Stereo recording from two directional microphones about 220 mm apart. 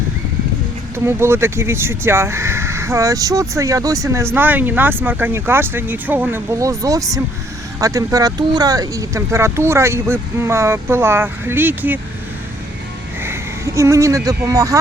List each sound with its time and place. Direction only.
0.9 s speech: 10° right (ahead or behind)
13.2 s speech: 10° right (ahead or behind)